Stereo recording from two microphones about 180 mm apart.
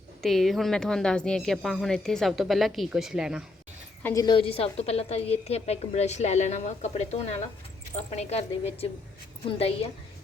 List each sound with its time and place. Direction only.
0.2 s a woman's voice: centre (ahead or behind)
4.0 s a woman's voice: 20° left (ahead or behind)